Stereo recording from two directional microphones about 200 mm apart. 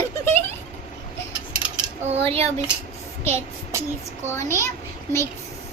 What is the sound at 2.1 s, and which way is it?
Speech, 30° right (ahead or behind).